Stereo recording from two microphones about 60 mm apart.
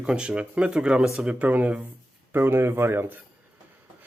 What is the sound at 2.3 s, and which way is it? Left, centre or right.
Speech, right.